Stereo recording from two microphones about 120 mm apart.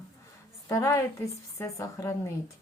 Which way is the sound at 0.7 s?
25° left (ahead or behind).